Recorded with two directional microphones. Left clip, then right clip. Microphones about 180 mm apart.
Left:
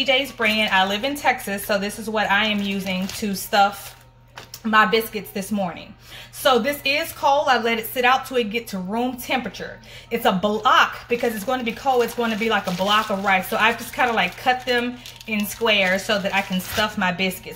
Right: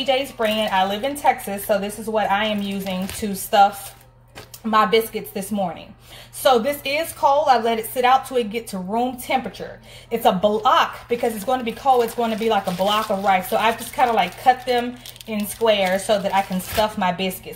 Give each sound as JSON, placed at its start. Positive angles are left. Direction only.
{"t": 0.4, "sound": "a woman's voice", "side_deg": 20}